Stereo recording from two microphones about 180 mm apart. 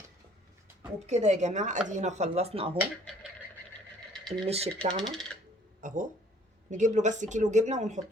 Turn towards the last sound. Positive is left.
turn(degrees=-40)  # may be behind; listen again after turning